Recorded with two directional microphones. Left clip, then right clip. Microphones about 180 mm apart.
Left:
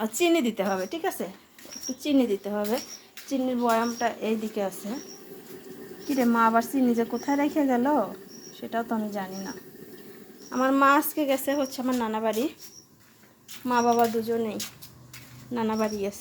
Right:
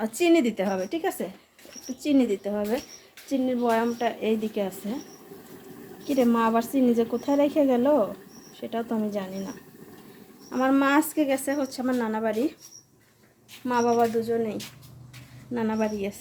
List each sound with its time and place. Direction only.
0.0 s a woman's voice: 5° right (ahead or behind)
6.1 s a woman's voice: 20° right (ahead or behind); by 12.5 s 5° right (ahead or behind)
13.7 s a woman's voice: 10° right (ahead or behind)